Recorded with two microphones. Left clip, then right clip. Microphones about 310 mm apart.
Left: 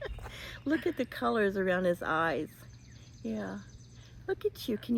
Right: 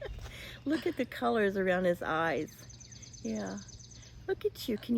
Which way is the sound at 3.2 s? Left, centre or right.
Centre.